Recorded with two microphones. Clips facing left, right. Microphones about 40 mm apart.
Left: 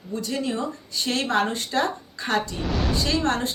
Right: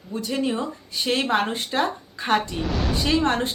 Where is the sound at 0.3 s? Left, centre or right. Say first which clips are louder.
Right 3 dB; right.